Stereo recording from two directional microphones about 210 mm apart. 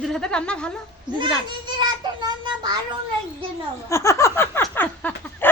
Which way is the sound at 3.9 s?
15° left (ahead or behind).